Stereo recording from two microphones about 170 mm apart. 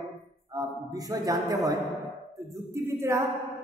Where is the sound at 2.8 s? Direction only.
15° right (ahead or behind).